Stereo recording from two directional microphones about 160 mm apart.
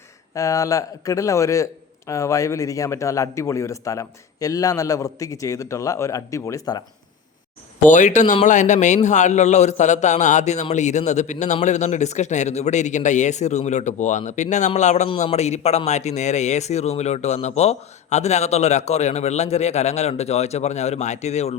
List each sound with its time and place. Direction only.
0.3 s a man's voice: 20° left (ahead or behind)
7.8 s a man's voice: 50° left (ahead or behind)